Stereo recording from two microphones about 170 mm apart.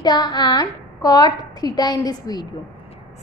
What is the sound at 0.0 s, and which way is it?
A woman's voice, 25° left (ahead or behind).